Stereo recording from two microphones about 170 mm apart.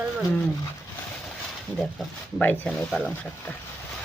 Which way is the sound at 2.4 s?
10° left (ahead or behind).